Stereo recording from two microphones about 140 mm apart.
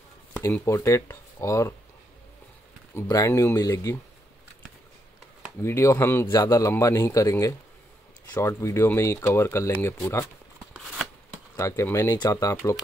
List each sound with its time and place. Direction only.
0.5 s speech: 20° left (ahead or behind)
2.9 s speech: 20° left (ahead or behind)
5.6 s speech: 20° left (ahead or behind)
11.5 s speech: 20° left (ahead or behind)